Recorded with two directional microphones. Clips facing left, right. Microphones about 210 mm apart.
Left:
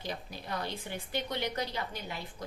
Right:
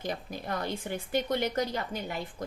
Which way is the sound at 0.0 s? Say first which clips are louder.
Right 5 dB; 50° right (ahead or behind).